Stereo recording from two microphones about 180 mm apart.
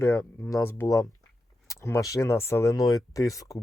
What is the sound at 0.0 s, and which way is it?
Speech, 15° left (ahead or behind).